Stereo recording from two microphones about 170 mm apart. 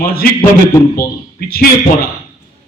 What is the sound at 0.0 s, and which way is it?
Speech, 60° left (ahead or behind).